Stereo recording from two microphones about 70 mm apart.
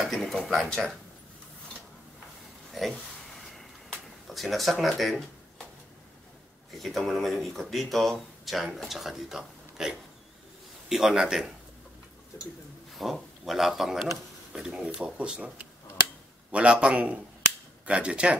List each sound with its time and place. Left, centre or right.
0.0 s speech: centre
2.7 s a sound: centre
4.3 s speech: centre
6.7 s a man's voice: centre
12.9 s a man's voice: centre